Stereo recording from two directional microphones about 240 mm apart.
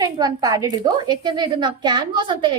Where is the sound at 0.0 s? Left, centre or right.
Centre.